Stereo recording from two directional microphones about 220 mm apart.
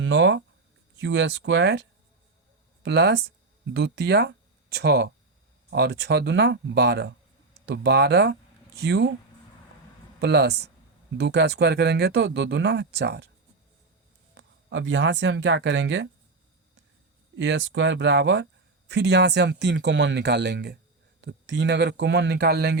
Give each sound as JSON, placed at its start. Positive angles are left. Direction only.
{"t": 0.0, "sound": "speech", "side_deg": -55}
{"t": 10.2, "sound": "speech", "side_deg": -50}
{"t": 14.3, "sound": "speech", "side_deg": -55}
{"t": 17.3, "sound": "speech", "side_deg": -55}